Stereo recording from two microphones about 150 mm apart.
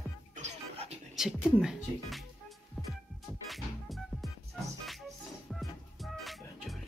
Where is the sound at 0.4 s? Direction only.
45° right (ahead or behind).